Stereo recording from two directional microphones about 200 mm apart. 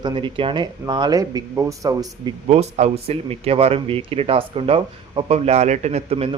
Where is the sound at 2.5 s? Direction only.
35° right (ahead or behind).